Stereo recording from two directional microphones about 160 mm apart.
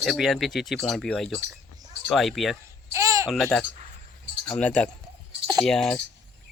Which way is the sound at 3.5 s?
5° left (ahead or behind).